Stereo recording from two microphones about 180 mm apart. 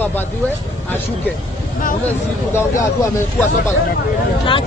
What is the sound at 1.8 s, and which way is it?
Speech, 50° left (ahead or behind).